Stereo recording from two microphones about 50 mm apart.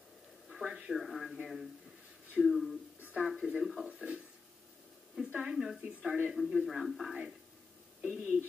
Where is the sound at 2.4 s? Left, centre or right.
Centre.